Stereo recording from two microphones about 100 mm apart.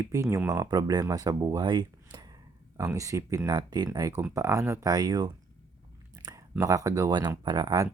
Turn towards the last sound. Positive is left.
turn(degrees=-40)  # may be behind; listen again after turning